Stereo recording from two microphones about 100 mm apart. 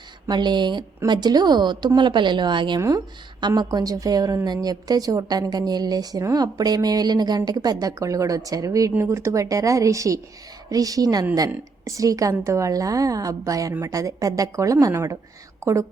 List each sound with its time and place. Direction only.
0.3 s a woman's voice: 45° right (ahead or behind); by 15.9 s 30° right (ahead or behind)